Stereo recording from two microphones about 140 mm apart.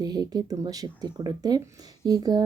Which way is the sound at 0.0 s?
25° right (ahead or behind).